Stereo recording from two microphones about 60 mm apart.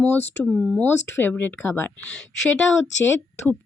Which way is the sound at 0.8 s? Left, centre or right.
Left.